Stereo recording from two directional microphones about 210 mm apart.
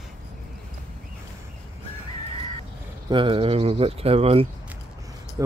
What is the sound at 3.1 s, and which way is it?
Speech, 25° right (ahead or behind).